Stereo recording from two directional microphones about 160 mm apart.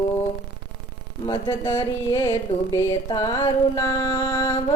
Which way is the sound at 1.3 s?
30° left (ahead or behind).